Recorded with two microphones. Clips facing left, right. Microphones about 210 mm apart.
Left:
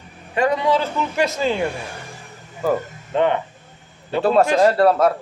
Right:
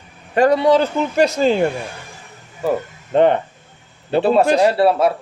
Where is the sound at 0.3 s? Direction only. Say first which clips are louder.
Right 5 dB; 35° right (ahead or behind).